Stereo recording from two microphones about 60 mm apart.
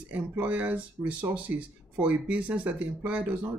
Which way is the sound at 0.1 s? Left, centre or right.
Right.